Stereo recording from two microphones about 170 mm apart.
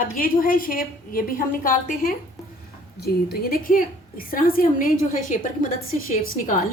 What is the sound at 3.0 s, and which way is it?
A woman's voice, 65° left (ahead or behind).